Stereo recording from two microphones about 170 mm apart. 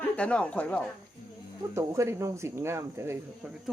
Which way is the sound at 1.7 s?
15° right (ahead or behind).